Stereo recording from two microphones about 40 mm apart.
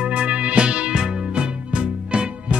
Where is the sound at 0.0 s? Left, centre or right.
Right.